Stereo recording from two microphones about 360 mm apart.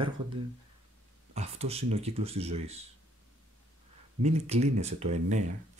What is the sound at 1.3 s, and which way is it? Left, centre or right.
Speech, centre.